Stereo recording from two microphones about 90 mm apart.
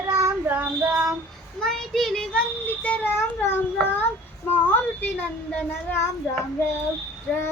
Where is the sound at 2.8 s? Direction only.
15° left (ahead or behind).